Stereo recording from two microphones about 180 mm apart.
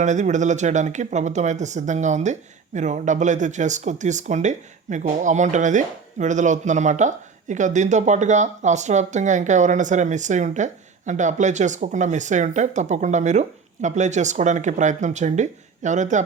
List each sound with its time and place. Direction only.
0.0 s speech: 40° right (ahead or behind)